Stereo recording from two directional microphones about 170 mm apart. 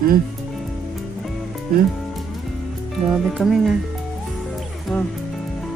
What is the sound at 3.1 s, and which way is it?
Speech, centre (ahead or behind).